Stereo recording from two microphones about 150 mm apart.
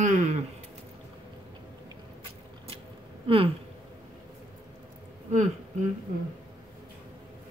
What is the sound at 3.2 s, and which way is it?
Speech, 35° right (ahead or behind).